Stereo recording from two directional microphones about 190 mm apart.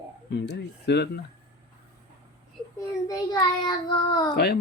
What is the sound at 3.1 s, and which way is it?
A child's voice, 20° left (ahead or behind).